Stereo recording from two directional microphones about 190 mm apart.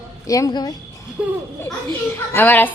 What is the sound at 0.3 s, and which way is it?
Speech, 20° left (ahead or behind).